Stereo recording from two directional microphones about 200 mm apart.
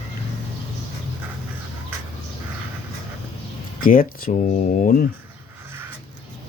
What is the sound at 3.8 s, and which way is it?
Speech, 45° left (ahead or behind).